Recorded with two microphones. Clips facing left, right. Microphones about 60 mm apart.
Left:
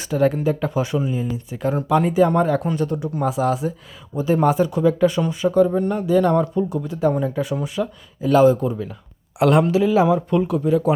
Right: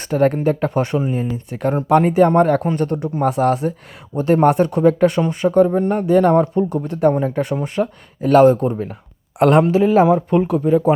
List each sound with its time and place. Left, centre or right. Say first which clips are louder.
0.0 s speech: right 3 dB; right
7.1 s speech: right 3 dB; right